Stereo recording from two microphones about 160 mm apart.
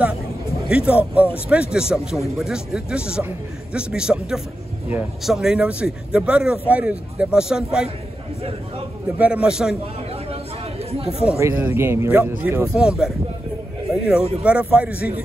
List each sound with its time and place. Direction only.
0.7 s speech: 5° right (ahead or behind)
9.2 s speech: 5° right (ahead or behind)
10.3 s a sound: 40° right (ahead or behind)
11.3 s speech: 15° right (ahead or behind)